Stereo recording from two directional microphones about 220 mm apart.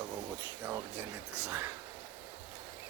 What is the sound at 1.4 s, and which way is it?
Speech, 15° right (ahead or behind).